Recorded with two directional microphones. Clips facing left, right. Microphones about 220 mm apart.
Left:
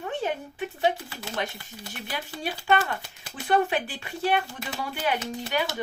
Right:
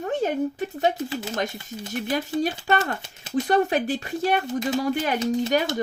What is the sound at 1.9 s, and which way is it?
Speech, 45° right (ahead or behind).